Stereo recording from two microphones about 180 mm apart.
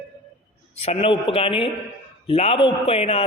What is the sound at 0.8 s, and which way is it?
A man's voice, 35° left (ahead or behind).